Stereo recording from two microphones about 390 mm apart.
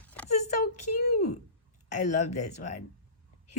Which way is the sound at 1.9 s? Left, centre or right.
Centre.